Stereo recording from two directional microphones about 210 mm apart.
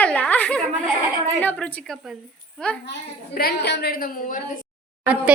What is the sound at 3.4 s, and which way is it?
A woman's voice, 50° left (ahead or behind).